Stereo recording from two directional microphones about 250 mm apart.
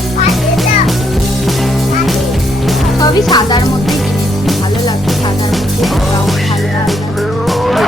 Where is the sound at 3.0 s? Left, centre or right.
Centre.